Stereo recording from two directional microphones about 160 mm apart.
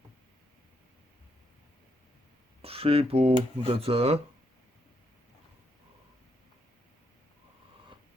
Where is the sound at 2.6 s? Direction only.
35° right (ahead or behind).